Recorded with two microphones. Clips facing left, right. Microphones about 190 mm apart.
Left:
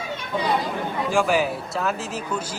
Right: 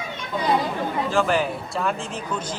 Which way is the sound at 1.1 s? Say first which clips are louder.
Left 2 dB; 10° left (ahead or behind).